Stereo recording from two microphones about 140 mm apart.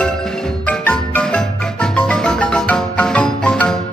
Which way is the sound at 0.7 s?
10° left (ahead or behind).